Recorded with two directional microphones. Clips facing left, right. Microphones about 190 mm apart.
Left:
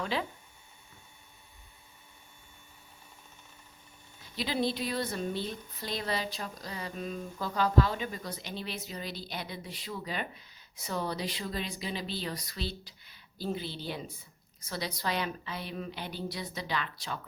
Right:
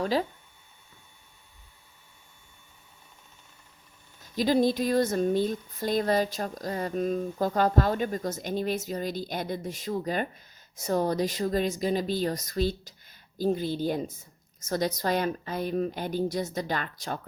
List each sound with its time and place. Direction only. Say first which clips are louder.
0.0 s speech: right 7 dB; 40° right (ahead or behind)
4.2 s speech: right 8 dB; 45° right (ahead or behind)